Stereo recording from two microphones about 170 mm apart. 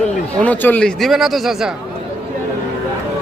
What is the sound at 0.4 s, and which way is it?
Speech, 10° left (ahead or behind).